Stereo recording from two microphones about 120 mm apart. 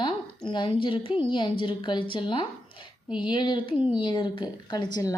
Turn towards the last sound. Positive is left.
turn(degrees=35)  # may be behind; listen again after turning